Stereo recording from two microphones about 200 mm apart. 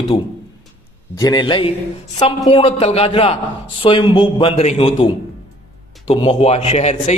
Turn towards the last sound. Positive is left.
turn(degrees=35)  # may be behind; listen again after turning